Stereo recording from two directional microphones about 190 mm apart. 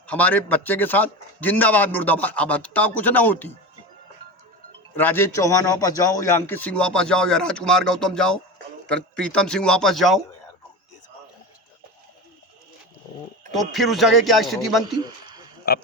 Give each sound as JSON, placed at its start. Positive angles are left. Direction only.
{"t": 0.1, "sound": "a man's voice", "side_deg": 10}
{"t": 4.9, "sound": "a man's voice", "side_deg": 10}
{"t": 13.7, "sound": "a man's voice", "side_deg": 0}
{"t": 15.6, "sound": "speech", "side_deg": 55}